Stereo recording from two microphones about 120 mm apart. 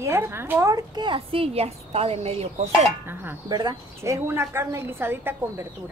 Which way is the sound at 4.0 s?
20° right (ahead or behind).